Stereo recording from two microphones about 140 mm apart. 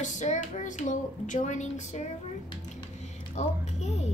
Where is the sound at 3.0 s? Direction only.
50° left (ahead or behind).